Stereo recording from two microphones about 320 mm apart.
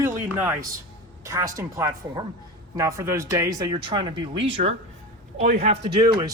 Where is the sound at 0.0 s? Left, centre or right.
Centre.